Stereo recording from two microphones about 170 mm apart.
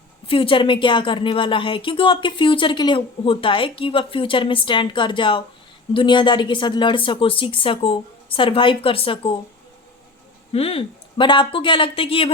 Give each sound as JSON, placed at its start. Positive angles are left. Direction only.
{"t": 0.3, "sound": "speech", "side_deg": 30}
{"t": 10.5, "sound": "speech", "side_deg": 35}